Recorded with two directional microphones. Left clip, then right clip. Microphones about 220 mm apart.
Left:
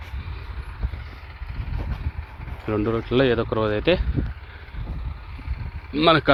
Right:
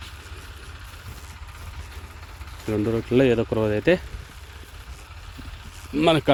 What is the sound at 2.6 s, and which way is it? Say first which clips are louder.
Speech: left 1 dB; 20° right (ahead or behind).